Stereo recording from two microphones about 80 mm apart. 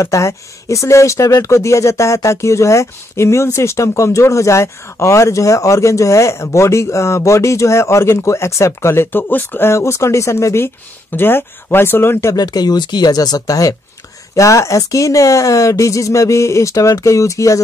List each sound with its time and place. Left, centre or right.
0.0 s speech: left
12.4 s speech: left